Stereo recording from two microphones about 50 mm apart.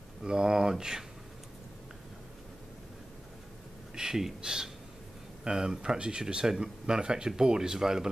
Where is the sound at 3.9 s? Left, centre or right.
Centre.